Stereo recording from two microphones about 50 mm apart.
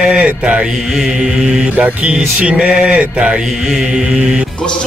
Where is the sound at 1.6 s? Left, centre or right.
Right.